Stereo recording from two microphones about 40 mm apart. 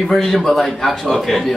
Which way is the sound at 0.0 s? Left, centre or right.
Centre.